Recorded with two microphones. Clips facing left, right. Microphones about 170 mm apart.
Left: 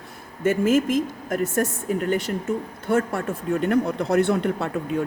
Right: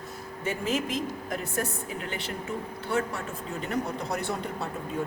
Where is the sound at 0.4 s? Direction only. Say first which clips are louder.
Left 10 dB; 50° left (ahead or behind).